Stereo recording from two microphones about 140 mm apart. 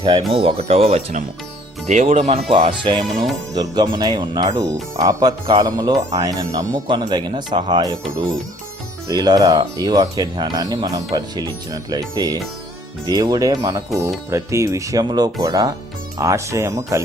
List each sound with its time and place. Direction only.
0.0 s speech: 30° right (ahead or behind)
0.3 s speech: 45° right (ahead or behind); by 17.0 s 20° right (ahead or behind)